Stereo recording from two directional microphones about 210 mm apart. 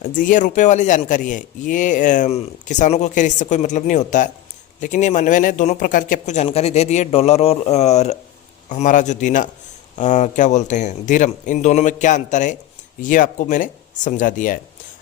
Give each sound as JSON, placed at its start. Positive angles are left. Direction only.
{"t": 0.0, "sound": "speech", "side_deg": 40}